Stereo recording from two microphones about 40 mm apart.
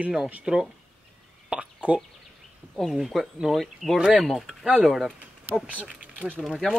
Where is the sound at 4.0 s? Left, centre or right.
Centre.